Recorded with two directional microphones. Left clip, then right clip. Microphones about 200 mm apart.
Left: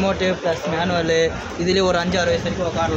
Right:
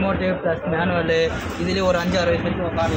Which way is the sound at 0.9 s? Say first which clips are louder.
Left 2 dB; 15° left (ahead or behind).